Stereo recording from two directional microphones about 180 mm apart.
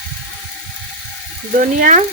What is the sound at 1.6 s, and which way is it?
Speech, 45° right (ahead or behind).